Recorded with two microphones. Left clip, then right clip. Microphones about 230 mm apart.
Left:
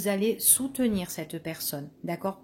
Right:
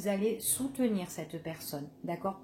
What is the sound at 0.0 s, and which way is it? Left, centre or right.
Speech, left.